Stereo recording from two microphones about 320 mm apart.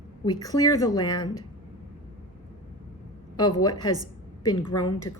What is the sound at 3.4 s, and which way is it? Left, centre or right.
Speech, centre.